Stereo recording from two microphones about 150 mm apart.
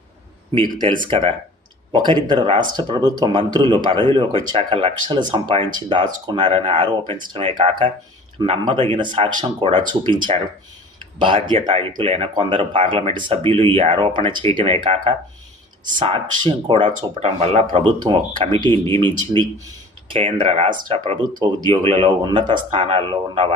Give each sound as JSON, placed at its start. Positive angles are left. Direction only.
{"t": 0.5, "sound": "speech", "side_deg": -30}